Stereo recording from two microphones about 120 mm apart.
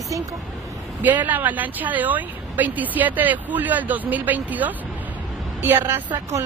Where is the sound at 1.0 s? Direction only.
15° right (ahead or behind).